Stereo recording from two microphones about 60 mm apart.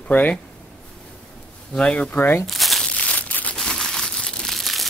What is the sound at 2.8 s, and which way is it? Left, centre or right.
Crumpling, centre.